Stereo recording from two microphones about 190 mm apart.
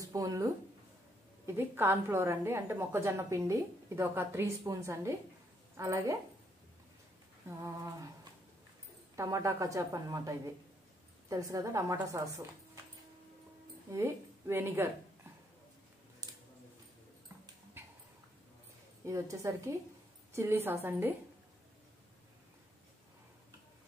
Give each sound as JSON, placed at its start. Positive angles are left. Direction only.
{"t": 0.0, "sound": "a woman's voice", "side_deg": -20}
{"t": 7.4, "sound": "a woman's voice", "side_deg": -15}
{"t": 13.9, "sound": "speech", "side_deg": -10}
{"t": 19.0, "sound": "a woman's voice", "side_deg": -15}